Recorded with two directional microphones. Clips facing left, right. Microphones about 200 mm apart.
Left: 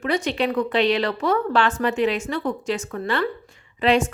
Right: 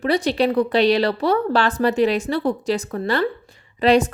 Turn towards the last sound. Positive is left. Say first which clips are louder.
# right 3 dB
turn(degrees=-35)  # may be behind; listen again after turning